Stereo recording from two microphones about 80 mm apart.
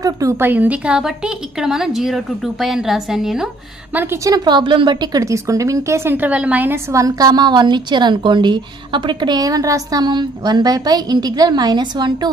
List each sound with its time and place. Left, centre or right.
0.0 s a woman's voice: right
0.4 s a woman's voice: right; by 3.4 s centre
3.9 s a woman's voice: right
4.5 s a woman's voice: right
5.2 s speech: right
6.1 s a woman's voice: centre
6.9 s a woman's voice: right
9.4 s a woman's voice: right